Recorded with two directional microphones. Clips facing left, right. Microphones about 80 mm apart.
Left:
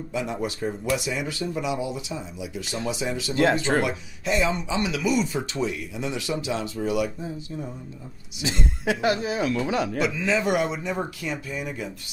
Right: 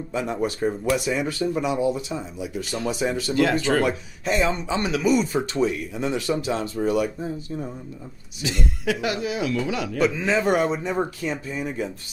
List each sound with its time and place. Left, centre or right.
0.1 s speech: right
3.5 s speech: left
3.8 s speech: right
8.4 s speech: left
10.0 s speech: right